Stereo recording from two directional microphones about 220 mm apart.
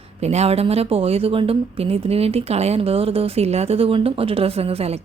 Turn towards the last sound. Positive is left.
turn(degrees=-25)  # may be behind; listen again after turning